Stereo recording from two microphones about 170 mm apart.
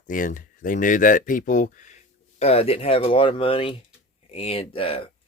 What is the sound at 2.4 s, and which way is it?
Speech, 35° left (ahead or behind).